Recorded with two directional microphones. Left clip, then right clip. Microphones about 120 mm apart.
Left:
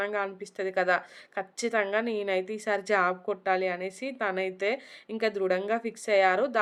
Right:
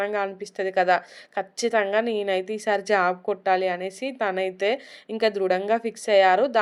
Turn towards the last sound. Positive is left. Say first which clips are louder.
# right 6 dB
turn(degrees=-15)  # may be behind; listen again after turning